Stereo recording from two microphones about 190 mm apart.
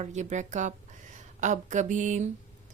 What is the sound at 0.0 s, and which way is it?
Speech, 40° right (ahead or behind).